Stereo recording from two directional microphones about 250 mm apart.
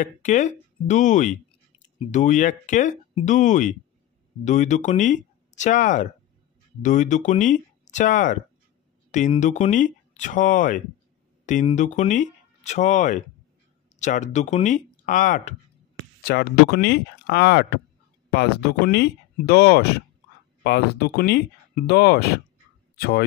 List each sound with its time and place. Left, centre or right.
0.0 s speech: left